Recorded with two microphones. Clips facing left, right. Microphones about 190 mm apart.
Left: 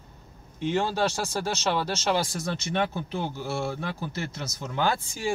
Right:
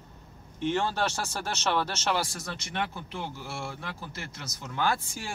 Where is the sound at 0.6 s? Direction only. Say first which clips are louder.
Left 2 dB; 10° left (ahead or behind).